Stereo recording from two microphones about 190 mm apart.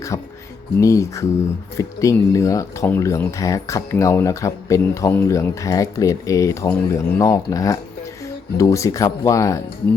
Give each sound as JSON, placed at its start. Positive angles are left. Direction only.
{"t": 0.1, "sound": "a woman's voice", "side_deg": 15}